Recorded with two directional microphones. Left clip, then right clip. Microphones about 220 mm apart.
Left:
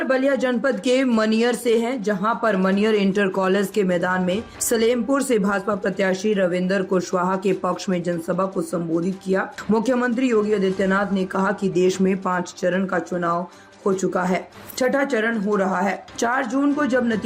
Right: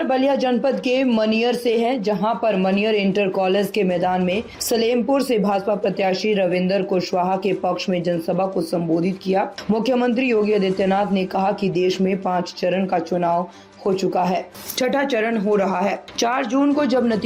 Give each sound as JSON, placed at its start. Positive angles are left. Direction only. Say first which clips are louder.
{"t": 0.0, "sound": "speech", "louder": "right 1 dB", "side_deg": -5}
{"t": 14.9, "sound": "speech", "louder": "right 2 dB", "side_deg": -15}
{"t": 15.6, "sound": "speech", "louder": "right 1 dB", "side_deg": -5}